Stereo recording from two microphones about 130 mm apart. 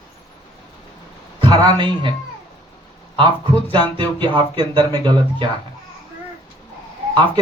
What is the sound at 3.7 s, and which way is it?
Speech, 40° right (ahead or behind).